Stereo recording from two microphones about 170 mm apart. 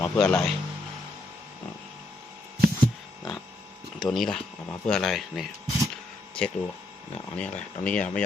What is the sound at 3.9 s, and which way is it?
Speech, centre (ahead or behind).